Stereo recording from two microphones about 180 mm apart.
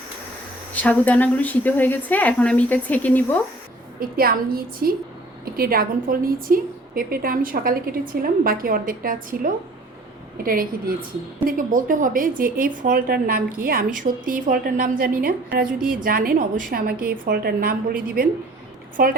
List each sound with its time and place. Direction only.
0.7 s a woman's voice: 10° left (ahead or behind)
4.0 s a woman's voice: 55° right (ahead or behind)